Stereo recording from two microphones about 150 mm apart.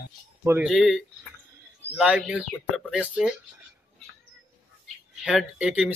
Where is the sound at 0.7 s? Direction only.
Centre (ahead or behind).